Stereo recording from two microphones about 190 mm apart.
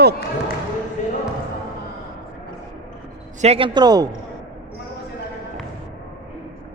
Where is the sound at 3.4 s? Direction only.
30° right (ahead or behind).